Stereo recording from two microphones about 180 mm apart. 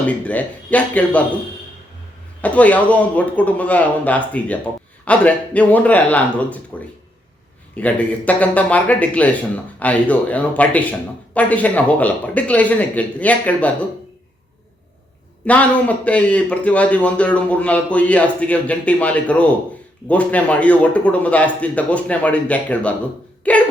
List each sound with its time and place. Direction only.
0.0 s speech: 10° left (ahead or behind)
2.4 s speech: 10° left (ahead or behind)
15.4 s speech: 10° left (ahead or behind)